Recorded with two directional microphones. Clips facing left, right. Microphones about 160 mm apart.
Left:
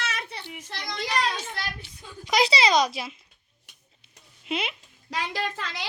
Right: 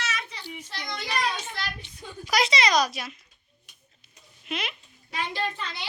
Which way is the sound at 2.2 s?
30° left (ahead or behind).